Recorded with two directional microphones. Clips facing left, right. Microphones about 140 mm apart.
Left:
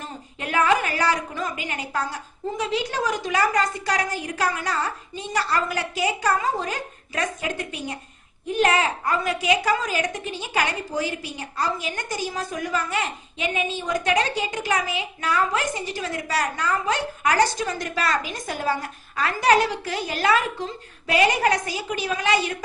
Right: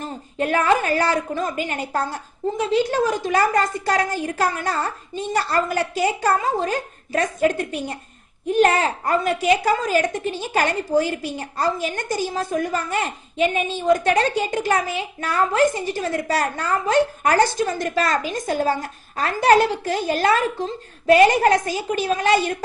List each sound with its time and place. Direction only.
0.3 s a woman's voice: 40° right (ahead or behind)